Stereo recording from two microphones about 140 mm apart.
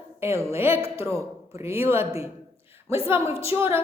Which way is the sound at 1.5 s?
20° right (ahead or behind).